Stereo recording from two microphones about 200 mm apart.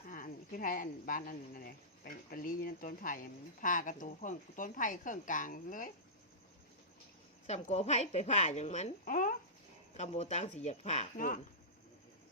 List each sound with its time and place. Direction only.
0.1 s a woman's voice: 45° left (ahead or behind)
7.4 s speech: 35° left (ahead or behind)